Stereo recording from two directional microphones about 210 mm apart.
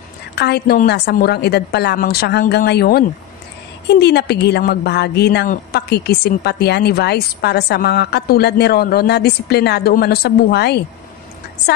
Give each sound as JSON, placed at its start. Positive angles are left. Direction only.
{"t": 0.4, "sound": "a woman's voice", "side_deg": 50}